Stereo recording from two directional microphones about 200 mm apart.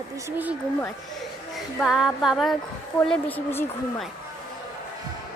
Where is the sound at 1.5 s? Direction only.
Centre (ahead or behind).